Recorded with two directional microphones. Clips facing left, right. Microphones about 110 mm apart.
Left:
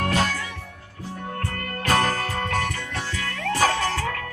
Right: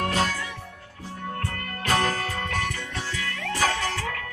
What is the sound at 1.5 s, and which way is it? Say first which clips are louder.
Music: left 3 dB; 50° left (ahead or behind).